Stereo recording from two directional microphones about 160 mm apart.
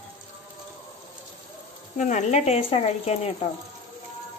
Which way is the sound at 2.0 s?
50° left (ahead or behind).